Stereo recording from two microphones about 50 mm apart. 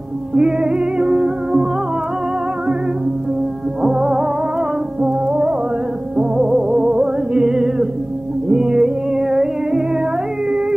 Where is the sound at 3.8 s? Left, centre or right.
Centre.